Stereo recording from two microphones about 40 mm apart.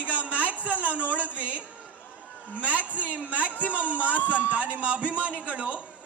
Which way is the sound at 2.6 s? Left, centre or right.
Right.